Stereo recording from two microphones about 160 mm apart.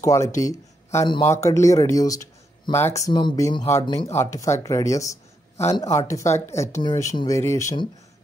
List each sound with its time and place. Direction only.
0.0 s speech: 20° left (ahead or behind)
3.8 s speech: 30° left (ahead or behind)
4.1 s speech: 15° left (ahead or behind)